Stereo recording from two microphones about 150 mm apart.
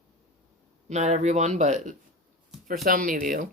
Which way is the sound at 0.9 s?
50° right (ahead or behind).